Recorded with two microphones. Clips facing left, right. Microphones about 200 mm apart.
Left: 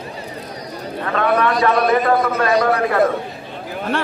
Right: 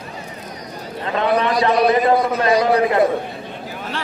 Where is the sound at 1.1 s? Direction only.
20° right (ahead or behind).